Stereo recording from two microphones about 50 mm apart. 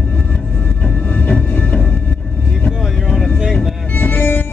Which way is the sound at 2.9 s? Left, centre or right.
Centre.